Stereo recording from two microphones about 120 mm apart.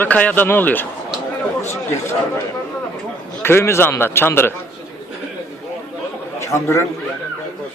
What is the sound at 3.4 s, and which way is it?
A man's voice, 20° left (ahead or behind).